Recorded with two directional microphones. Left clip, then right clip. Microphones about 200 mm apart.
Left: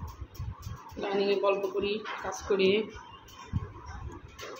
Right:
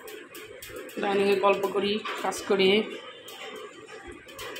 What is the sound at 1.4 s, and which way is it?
Speech, 20° right (ahead or behind).